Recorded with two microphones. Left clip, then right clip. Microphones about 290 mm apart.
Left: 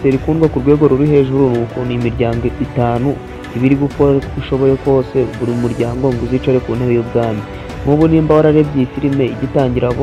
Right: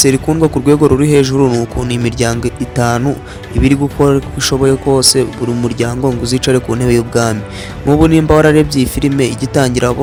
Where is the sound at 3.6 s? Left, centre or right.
Right.